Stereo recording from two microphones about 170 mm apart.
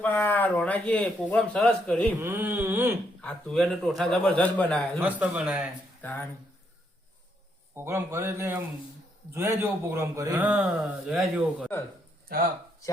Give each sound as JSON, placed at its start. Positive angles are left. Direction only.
{"t": 0.0, "sound": "speech", "side_deg": 10}
{"t": 2.2, "sound": "a man's voice", "side_deg": -10}
{"t": 3.2, "sound": "a man's voice", "side_deg": 5}
{"t": 4.9, "sound": "a man's voice", "side_deg": -10}
{"t": 6.0, "sound": "speech", "side_deg": 10}
{"t": 7.8, "sound": "a man's voice", "side_deg": -15}
{"t": 12.3, "sound": "speech", "side_deg": -60}